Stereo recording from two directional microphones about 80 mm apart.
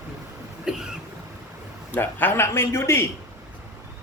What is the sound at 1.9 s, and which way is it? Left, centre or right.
A man's voice, left.